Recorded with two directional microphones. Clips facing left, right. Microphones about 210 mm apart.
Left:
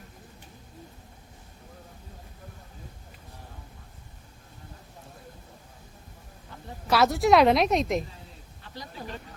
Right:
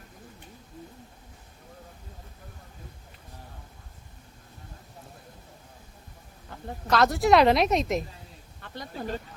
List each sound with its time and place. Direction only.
6.8 s a woman's voice: 5° left (ahead or behind)
8.7 s speech: 55° right (ahead or behind)